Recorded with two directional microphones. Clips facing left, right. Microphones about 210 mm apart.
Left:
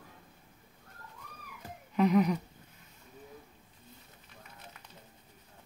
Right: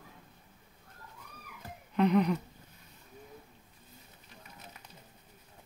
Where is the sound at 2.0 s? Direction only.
Centre (ahead or behind).